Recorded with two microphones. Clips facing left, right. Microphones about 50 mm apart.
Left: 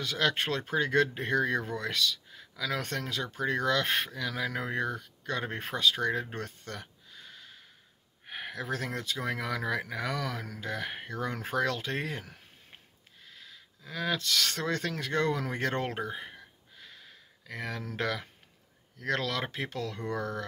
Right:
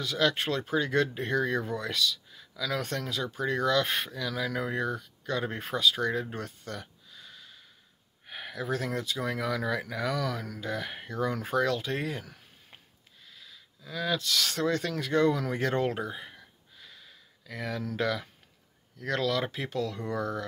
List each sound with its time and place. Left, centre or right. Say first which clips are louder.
0.0 s speech: right 2 dB; left
1.8 s speech: right 1 dB; left
2.3 s a sound: right 1 dB; left
2.8 s speech: right 1 dB; left
5.8 s speech: right 1 dB; left
8.3 s a sound: left 2 dB; left
8.5 s speech: right 4 dB; left
11.5 s speech: right 1 dB; left
13.3 s a sound: left 1 dB; left
14.1 s speech: right 1 dB; left
15.4 s a sound: right 3 dB; left
18.9 s speech: right 2 dB; left